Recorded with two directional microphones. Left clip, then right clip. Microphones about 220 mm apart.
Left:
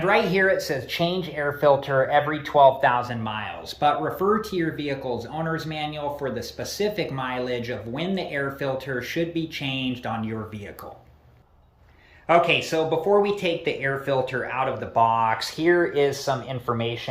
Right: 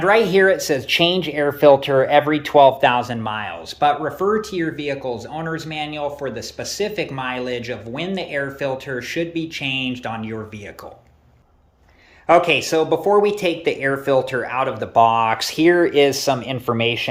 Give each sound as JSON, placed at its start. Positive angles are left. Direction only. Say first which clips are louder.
{"t": 0.1, "sound": "speech", "louder": "right 6 dB", "side_deg": -25}
{"t": 3.8, "sound": "speech", "louder": "right 4 dB", "side_deg": -5}
{"t": 12.3, "sound": "speech", "louder": "right 5 dB", "side_deg": -20}